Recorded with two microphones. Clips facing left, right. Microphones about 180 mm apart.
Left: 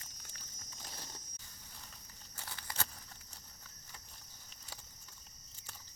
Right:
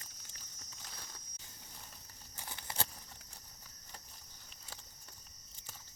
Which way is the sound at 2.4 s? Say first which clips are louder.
Right 2 dB; 20° right (ahead or behind).